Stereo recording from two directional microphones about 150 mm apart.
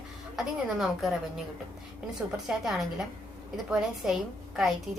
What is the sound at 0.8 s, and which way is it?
Speech, centre (ahead or behind).